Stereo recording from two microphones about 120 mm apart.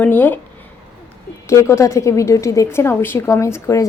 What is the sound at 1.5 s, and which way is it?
A woman's voice, 25° left (ahead or behind).